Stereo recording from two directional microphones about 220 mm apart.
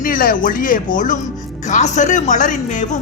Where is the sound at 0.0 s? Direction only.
40° left (ahead or behind).